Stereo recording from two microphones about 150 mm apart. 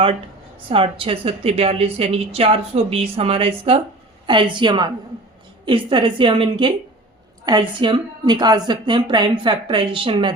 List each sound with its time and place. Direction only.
0.7 s a woman's voice: 35° right (ahead or behind)